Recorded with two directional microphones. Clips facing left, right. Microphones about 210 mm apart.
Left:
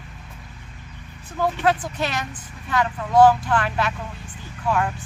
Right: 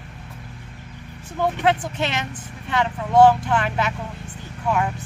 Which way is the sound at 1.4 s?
20° right (ahead or behind).